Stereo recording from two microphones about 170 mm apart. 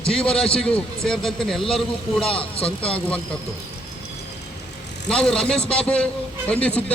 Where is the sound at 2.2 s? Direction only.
35° left (ahead or behind).